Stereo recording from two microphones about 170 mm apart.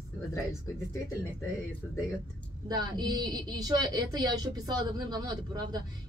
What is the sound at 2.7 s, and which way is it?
Speech, 25° right (ahead or behind).